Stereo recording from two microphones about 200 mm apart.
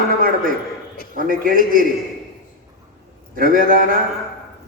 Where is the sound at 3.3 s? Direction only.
45° right (ahead or behind).